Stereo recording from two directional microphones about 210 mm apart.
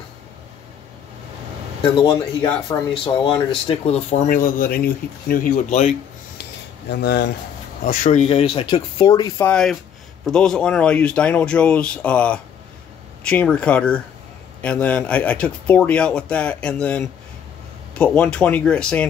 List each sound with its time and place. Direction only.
2.0 s speech: 20° left (ahead or behind)
6.9 s speech: 50° left (ahead or behind)
7.8 s speech: 40° left (ahead or behind); by 9.3 s 20° left (ahead or behind)
9.4 s speech: 5° left (ahead or behind)